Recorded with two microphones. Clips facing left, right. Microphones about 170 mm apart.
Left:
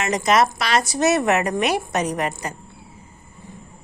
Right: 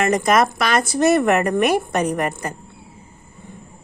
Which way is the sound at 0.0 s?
55° right (ahead or behind).